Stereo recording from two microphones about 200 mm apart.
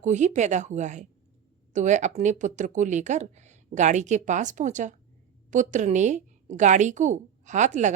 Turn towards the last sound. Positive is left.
turn(degrees=-35)  # may be behind; listen again after turning